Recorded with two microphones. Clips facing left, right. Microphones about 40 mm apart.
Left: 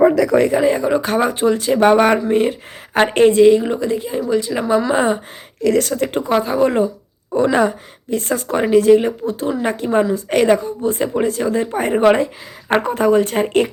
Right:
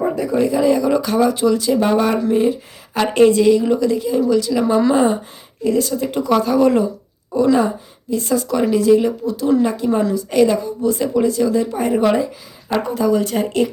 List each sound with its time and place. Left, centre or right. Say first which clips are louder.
0.0 s a sound: left 6 dB; left
0.6 s speech: even; left
1.8 s a sound: left 8 dB; left
2.3 s speech: even; left
5.6 s speech: left 2 dB; left
6.2 s speech: right 3 dB; left
7.3 s speech: even; left